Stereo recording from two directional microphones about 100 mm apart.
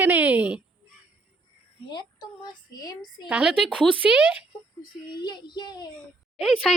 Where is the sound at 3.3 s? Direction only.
10° right (ahead or behind).